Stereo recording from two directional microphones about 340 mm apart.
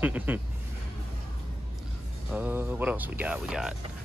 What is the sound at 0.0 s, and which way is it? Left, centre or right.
Speech, centre.